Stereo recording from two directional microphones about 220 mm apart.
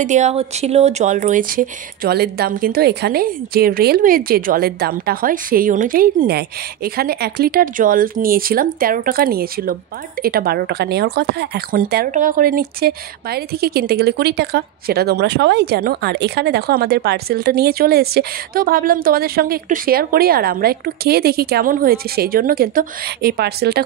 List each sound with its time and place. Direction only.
0.0 s speech: 30° right (ahead or behind)